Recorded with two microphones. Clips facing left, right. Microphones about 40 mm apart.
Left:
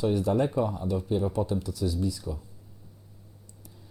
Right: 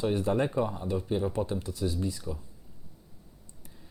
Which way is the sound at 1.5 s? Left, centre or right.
Right.